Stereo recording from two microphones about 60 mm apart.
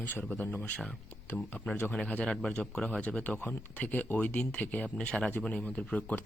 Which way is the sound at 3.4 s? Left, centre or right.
Left.